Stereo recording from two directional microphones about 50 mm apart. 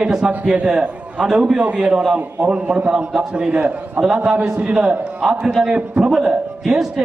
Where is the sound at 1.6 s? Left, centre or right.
Right.